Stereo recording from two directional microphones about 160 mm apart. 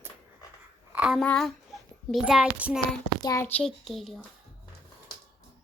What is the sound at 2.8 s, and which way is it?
Speech, 25° left (ahead or behind).